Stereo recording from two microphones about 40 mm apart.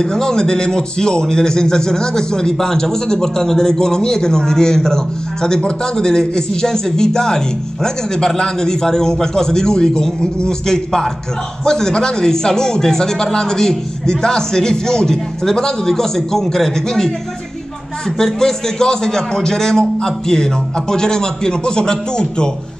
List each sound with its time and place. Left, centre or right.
0.0 s a man's voice: centre
18.1 s a man's voice: centre